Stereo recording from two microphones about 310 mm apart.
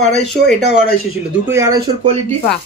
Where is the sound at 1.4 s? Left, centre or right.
Centre.